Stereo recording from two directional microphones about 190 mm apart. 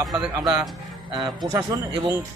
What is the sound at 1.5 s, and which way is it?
Speech, 15° right (ahead or behind).